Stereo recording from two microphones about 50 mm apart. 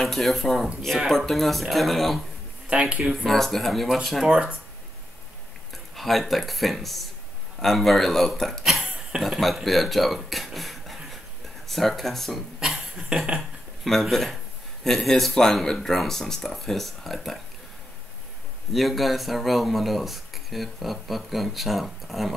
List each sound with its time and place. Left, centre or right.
0.0 s speech: centre
2.7 s speech: right
3.3 s speech: centre
4.2 s speech: centre
5.9 s speech: centre
8.6 s cough: centre
9.2 s speech: centre
12.5 s cough: centre
13.4 s speech: centre
18.7 s speech: centre